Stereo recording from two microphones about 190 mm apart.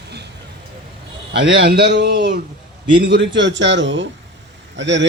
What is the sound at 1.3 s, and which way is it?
A man's voice, 60° right (ahead or behind).